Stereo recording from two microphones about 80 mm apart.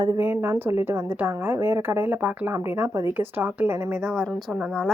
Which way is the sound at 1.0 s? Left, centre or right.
Right.